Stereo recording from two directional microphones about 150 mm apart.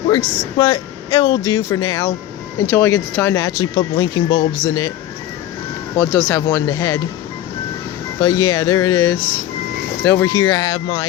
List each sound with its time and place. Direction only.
0.1 s speech: 30° left (ahead or behind)
6.0 s speech: 15° left (ahead or behind)
8.2 s speech: 25° left (ahead or behind)